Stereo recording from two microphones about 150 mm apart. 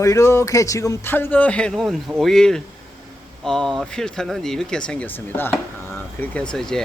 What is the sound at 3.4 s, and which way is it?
Speech, 5° left (ahead or behind).